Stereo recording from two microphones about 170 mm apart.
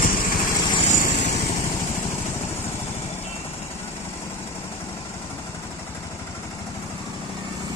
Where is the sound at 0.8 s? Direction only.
45° left (ahead or behind).